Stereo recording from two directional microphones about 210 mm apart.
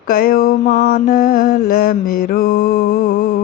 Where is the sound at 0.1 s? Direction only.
45° left (ahead or behind).